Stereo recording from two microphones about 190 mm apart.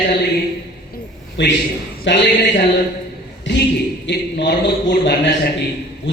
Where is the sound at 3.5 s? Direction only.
70° left (ahead or behind).